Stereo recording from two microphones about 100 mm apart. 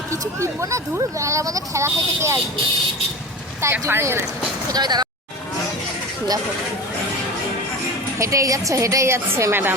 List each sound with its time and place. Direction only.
0.3 s speech: 30° right (ahead or behind)
3.6 s speech: 25° right (ahead or behind)
4.7 s speech: 45° right (ahead or behind)
8.2 s speech: 30° right (ahead or behind)